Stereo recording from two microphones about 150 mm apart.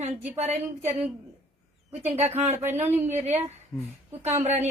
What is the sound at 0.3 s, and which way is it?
Speech, 50° right (ahead or behind).